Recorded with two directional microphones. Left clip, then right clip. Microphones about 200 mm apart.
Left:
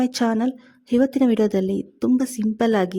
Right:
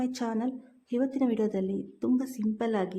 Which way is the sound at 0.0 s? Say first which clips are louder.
Left 10 dB; 40° left (ahead or behind).